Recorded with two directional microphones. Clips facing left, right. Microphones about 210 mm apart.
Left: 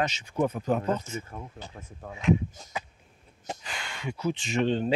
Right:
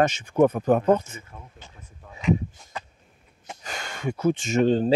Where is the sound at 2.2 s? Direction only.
5° left (ahead or behind).